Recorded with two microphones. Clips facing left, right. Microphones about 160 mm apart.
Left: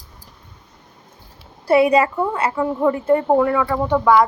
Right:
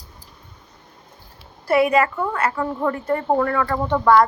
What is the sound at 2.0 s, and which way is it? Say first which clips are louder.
A woman's voice: left 2 dB; 15° left (ahead or behind).